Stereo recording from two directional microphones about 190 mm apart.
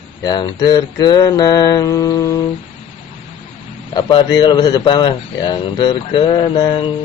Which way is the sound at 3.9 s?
20° left (ahead or behind).